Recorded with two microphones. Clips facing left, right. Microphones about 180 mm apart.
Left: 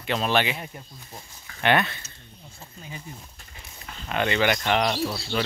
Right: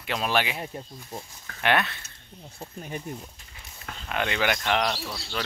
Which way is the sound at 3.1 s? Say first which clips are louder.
Right 6 dB; 55° right (ahead or behind).